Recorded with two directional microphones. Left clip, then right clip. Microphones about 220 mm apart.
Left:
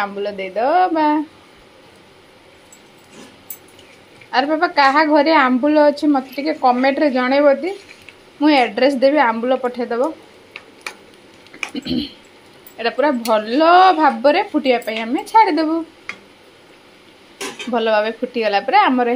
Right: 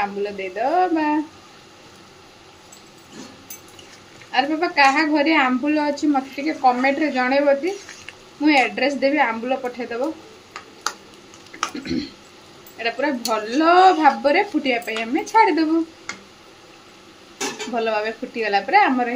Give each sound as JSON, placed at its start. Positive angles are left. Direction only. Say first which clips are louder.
{"t": 0.0, "sound": "a woman's voice", "louder": "left 2 dB", "side_deg": 15}
{"t": 4.3, "sound": "a woman's voice", "louder": "left 4 dB", "side_deg": 15}
{"t": 11.8, "sound": "a woman's voice", "louder": "left 4 dB", "side_deg": 10}
{"t": 17.7, "sound": "a woman's voice", "louder": "left 6 dB", "side_deg": 20}